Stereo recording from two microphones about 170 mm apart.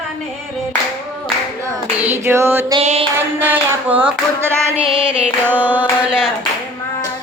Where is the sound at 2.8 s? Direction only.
35° right (ahead or behind).